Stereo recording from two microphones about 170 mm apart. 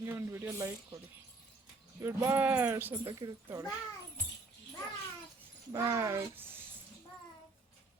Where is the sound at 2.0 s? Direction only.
15° right (ahead or behind).